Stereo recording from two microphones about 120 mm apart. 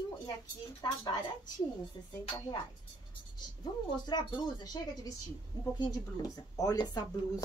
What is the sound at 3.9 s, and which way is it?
Speech, 35° left (ahead or behind).